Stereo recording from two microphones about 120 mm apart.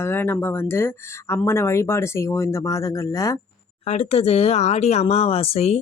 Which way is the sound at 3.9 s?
60° left (ahead or behind).